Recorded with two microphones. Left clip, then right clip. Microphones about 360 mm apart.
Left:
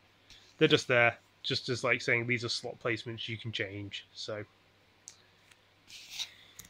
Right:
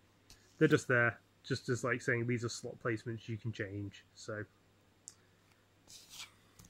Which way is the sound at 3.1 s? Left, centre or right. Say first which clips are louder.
Left 8 dB; left.